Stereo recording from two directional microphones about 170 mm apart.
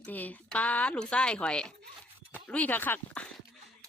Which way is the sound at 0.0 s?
10° left (ahead or behind).